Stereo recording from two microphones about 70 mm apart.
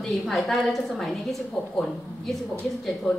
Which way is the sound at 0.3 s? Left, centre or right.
Centre.